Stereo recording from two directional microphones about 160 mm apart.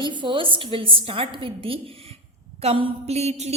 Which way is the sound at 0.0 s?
30° right (ahead or behind).